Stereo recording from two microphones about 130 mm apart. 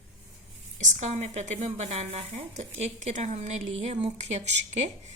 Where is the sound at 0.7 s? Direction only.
70° right (ahead or behind).